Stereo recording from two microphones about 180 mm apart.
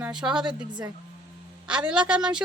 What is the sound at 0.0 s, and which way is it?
Speech, 5° right (ahead or behind).